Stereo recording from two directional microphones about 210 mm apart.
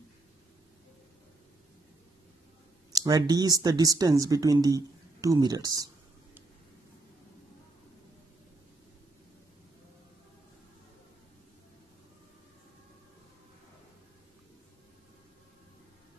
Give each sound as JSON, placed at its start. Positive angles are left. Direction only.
{"t": 2.9, "sound": "speech", "side_deg": -15}